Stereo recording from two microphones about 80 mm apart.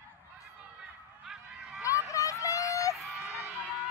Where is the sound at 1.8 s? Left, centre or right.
Left.